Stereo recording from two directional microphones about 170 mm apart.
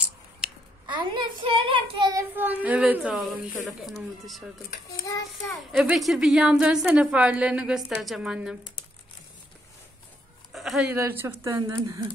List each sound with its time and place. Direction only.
0.4 s a sound: 5° right (ahead or behind)
0.8 s speech: 25° right (ahead or behind)
2.3 s a woman's voice: 10° right (ahead or behind)
5.7 s a woman's voice: 5° right (ahead or behind)
10.5 s a sound: centre (ahead or behind)
11.0 s speech: 15° right (ahead or behind)